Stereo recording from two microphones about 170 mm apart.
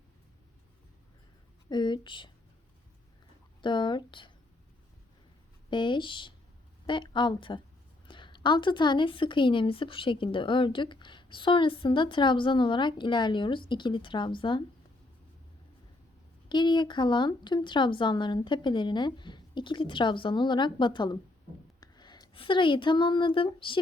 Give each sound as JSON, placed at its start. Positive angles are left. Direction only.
{"t": 1.7, "sound": "speech", "side_deg": 25}
{"t": 3.6, "sound": "speech", "side_deg": 25}
{"t": 5.7, "sound": "speech", "side_deg": 30}
{"t": 16.5, "sound": "speech", "side_deg": 25}